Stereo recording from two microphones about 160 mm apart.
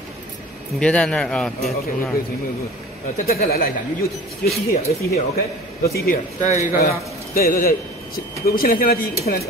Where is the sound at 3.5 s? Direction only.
60° left (ahead or behind).